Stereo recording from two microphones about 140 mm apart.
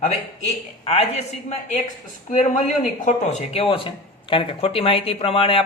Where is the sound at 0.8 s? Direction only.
45° left (ahead or behind).